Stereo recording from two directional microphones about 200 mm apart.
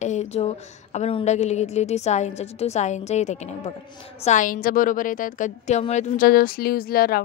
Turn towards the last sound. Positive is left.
turn(degrees=50)  # may be behind; listen again after turning